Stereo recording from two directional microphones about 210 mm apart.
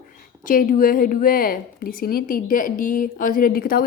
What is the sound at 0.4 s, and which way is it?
A woman's voice, 40° left (ahead or behind).